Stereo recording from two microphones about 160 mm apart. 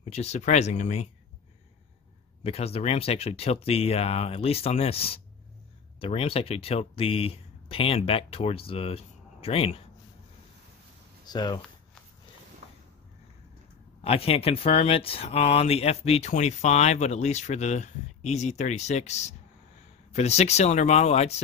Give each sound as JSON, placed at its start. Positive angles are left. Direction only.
{"t": 0.1, "sound": "speech", "side_deg": 45}
{"t": 2.4, "sound": "speech", "side_deg": 40}
{"t": 11.2, "sound": "speech", "side_deg": 25}
{"t": 14.0, "sound": "speech", "side_deg": 40}